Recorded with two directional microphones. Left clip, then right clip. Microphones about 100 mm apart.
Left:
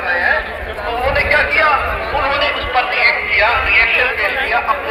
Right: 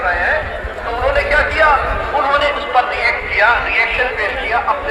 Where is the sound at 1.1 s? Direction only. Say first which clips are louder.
Left 2 dB; 45° right (ahead or behind).